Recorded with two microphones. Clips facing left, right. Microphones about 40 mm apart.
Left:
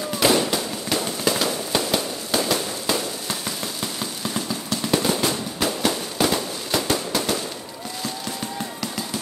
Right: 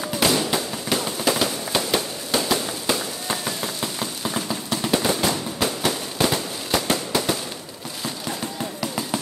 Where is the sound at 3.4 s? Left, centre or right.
Centre.